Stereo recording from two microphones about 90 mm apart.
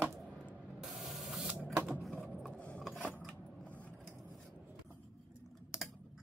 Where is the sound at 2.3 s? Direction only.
10° left (ahead or behind).